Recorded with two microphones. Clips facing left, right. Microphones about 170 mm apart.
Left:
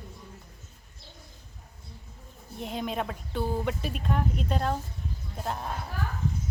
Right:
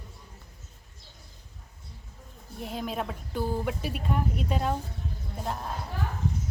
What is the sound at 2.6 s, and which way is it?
Speech, centre (ahead or behind).